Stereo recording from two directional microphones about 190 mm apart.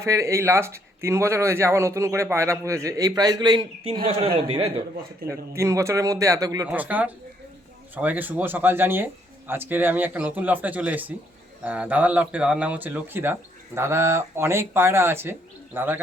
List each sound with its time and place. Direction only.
0.0 s speech: 15° right (ahead or behind)
5.3 s speech: 15° right (ahead or behind)